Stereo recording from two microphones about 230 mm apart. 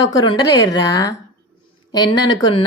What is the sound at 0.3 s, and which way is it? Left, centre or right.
Speech, centre.